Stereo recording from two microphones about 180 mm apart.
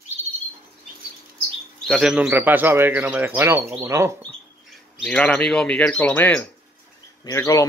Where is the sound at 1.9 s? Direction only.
5° right (ahead or behind).